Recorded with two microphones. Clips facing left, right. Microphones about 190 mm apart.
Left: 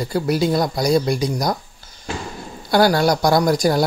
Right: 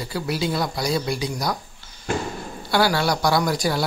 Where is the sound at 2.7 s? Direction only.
45° left (ahead or behind).